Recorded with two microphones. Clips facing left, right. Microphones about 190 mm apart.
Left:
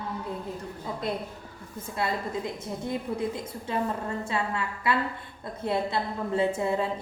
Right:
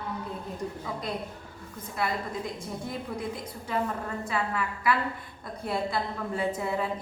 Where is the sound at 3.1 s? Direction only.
25° left (ahead or behind).